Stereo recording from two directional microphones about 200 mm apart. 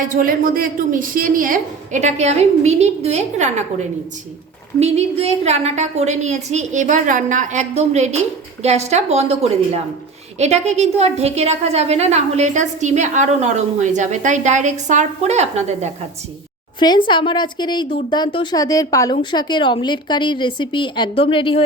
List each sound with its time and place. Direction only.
0.1 s a woman's voice: 45° right (ahead or behind)
16.8 s a woman's voice: 20° left (ahead or behind)